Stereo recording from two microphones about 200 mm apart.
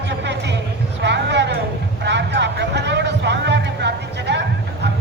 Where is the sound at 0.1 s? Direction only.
60° right (ahead or behind).